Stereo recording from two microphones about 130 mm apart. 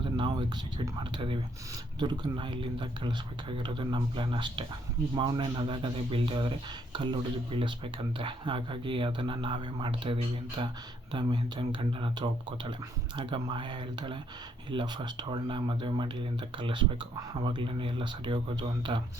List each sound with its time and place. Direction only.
0.2 s speech: 40° right (ahead or behind)